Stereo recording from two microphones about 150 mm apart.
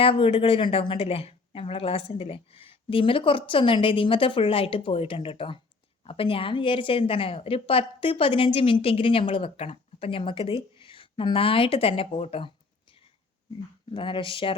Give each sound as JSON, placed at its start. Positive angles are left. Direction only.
{"t": 0.0, "sound": "a woman's voice", "side_deg": 40}
{"t": 13.9, "sound": "a woman's voice", "side_deg": 35}